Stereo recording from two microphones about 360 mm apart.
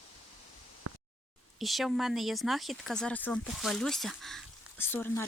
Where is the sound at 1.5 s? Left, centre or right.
Centre.